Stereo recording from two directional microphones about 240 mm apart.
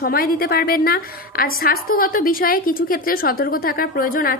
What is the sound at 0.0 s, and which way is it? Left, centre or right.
A woman's voice, left.